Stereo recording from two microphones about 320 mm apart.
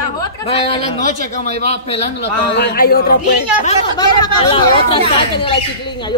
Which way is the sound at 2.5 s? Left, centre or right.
Left.